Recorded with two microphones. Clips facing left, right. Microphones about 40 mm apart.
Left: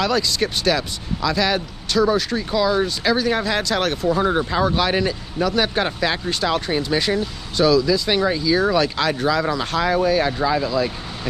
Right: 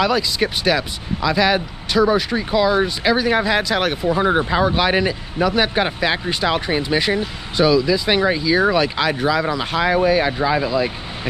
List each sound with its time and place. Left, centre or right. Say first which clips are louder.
0.0 s speech: right 2 dB; centre